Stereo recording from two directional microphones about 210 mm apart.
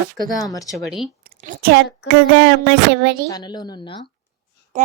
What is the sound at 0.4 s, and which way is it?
Speech, 15° left (ahead or behind).